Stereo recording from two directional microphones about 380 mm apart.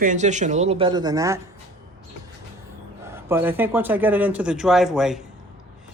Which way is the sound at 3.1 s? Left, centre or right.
Centre.